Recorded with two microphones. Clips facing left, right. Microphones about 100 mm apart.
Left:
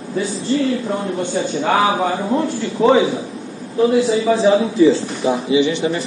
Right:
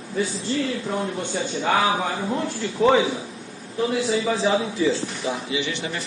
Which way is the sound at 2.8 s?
15° left (ahead or behind).